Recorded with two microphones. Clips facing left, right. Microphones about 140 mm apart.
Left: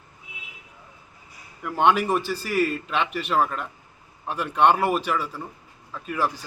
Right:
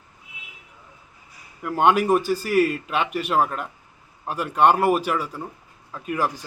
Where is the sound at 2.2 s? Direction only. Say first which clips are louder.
Right 6 dB; 45° right (ahead or behind).